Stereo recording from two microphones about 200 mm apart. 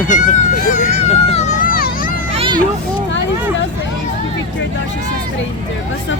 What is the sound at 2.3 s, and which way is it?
Children playing, 30° right (ahead or behind).